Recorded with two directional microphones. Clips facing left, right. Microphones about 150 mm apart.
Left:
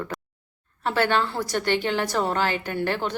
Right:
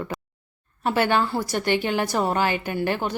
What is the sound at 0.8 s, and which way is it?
A woman's voice, 10° right (ahead or behind).